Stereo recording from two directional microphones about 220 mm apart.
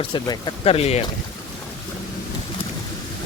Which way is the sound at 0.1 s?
20° left (ahead or behind).